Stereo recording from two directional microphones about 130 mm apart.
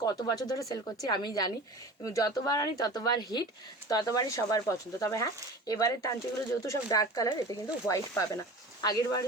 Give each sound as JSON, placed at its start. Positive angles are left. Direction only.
{"t": 0.0, "sound": "speech", "side_deg": 30}